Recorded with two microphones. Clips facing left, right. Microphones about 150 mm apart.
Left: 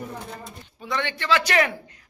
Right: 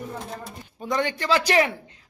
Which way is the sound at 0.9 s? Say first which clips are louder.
Right 1 dB; 40° right (ahead or behind).